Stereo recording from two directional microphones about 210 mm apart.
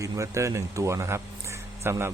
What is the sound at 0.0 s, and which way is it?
Speech, 15° right (ahead or behind).